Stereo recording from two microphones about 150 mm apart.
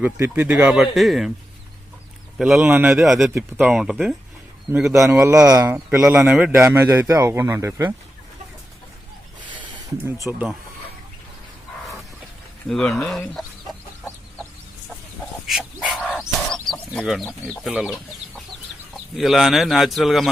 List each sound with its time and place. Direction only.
0.0 s speech: 15° right (ahead or behind)
2.4 s speech: 10° right (ahead or behind)
3.1 s speech: 5° right (ahead or behind)
4.7 s speech: 15° right (ahead or behind)
6.1 s speech: 5° right (ahead or behind)
10.3 s speech: 5° right (ahead or behind)
12.6 s speech: 5° left (ahead or behind)
15.4 s bird: centre (ahead or behind)
17.7 s speech: 5° right (ahead or behind)